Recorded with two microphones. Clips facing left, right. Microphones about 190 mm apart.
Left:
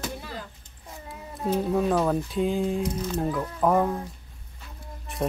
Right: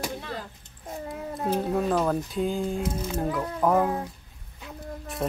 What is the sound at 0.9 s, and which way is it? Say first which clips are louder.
Cat: right 7 dB; 50° right (ahead or behind).